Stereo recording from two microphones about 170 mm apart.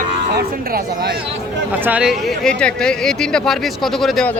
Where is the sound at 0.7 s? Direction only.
70° right (ahead or behind).